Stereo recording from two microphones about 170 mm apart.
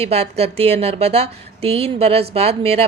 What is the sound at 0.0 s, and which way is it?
A woman's voice, 35° right (ahead or behind).